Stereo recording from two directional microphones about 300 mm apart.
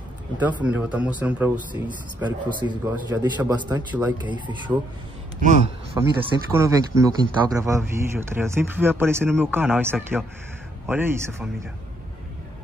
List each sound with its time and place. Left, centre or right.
0.4 s speech: centre
5.4 s speech: right
6.0 s speech: centre